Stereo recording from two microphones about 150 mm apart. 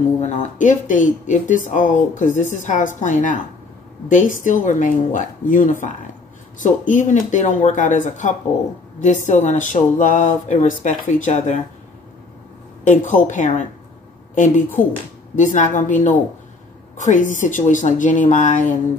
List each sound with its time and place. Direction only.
0.2 s speech: 55° left (ahead or behind)
12.8 s a woman's voice: 55° left (ahead or behind)